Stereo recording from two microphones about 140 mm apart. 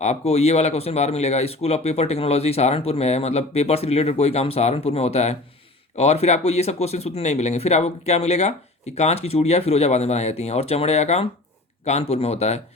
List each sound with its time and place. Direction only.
0.0 s speech: 50° left (ahead or behind)